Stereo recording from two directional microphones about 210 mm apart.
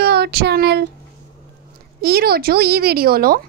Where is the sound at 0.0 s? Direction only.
50° right (ahead or behind).